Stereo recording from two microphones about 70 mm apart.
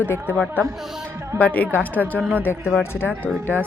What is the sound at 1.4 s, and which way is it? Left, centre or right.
Speech, left.